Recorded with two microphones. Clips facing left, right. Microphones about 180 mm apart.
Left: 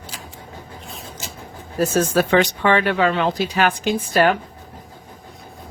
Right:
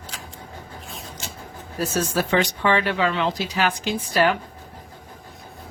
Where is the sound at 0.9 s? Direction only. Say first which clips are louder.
Left 2 dB; centre (ahead or behind).